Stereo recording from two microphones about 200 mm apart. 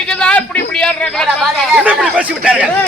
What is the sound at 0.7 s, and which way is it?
Speech, 5° left (ahead or behind).